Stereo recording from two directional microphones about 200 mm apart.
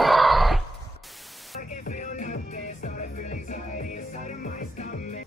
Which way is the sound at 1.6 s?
40° left (ahead or behind).